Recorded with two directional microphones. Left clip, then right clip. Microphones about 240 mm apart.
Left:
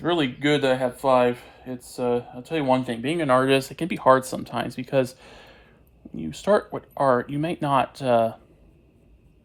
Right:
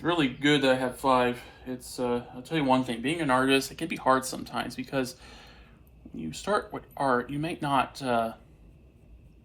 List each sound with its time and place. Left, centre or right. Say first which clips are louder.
0.0 s speech: left 3 dB; left